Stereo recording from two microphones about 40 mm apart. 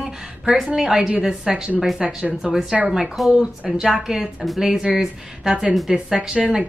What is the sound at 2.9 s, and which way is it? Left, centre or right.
A woman's voice, centre.